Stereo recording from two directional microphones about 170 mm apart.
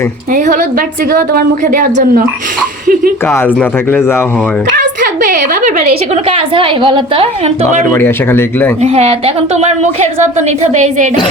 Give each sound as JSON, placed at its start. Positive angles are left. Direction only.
{"t": 0.3, "sound": "a woman's voice", "side_deg": -50}
{"t": 3.2, "sound": "speech", "side_deg": 15}
{"t": 5.0, "sound": "a woman's voice", "side_deg": -60}
{"t": 6.2, "sound": "a woman's voice", "side_deg": -35}
{"t": 7.9, "sound": "speech", "side_deg": 15}
{"t": 8.8, "sound": "a woman's voice", "side_deg": -40}